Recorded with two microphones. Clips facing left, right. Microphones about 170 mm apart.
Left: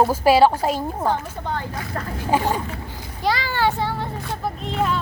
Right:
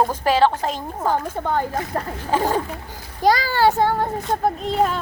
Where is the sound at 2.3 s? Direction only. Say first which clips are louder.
Even; 10° left (ahead or behind).